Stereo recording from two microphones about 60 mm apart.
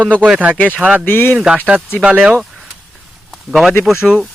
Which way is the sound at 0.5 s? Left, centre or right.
Left.